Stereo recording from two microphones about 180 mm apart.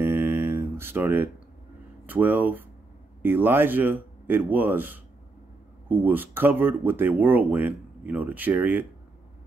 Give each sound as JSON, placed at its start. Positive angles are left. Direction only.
{"t": 0.0, "sound": "mantra", "side_deg": -15}
{"t": 2.0, "sound": "speech", "side_deg": -10}